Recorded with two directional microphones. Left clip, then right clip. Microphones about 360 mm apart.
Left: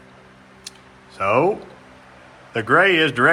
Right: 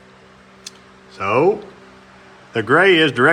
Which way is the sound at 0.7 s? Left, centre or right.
Centre.